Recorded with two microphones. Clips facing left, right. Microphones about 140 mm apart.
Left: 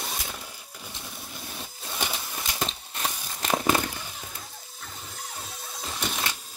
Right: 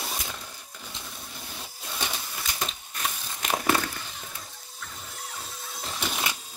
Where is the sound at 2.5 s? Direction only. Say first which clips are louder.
Left 5 dB; 30° left (ahead or behind).